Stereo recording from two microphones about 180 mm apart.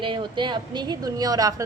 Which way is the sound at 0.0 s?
25° right (ahead or behind).